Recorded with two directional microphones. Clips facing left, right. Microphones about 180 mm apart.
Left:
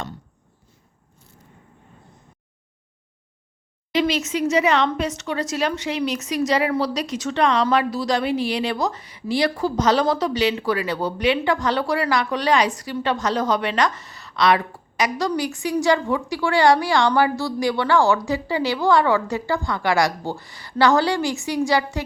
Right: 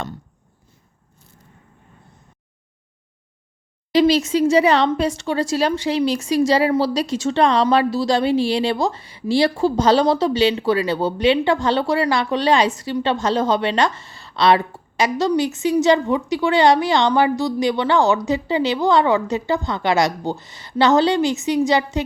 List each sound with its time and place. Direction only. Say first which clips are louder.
3.9 s a woman's voice: right 6 dB; 35° right (ahead or behind)